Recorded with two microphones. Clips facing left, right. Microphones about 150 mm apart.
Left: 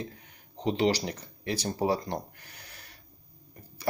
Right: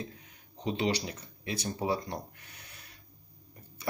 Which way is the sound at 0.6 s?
35° left (ahead or behind).